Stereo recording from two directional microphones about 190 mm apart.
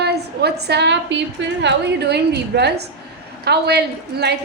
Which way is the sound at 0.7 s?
65° right (ahead or behind).